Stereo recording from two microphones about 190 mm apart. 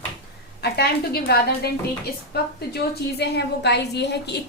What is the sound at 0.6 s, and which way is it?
A woman's voice, 60° left (ahead or behind).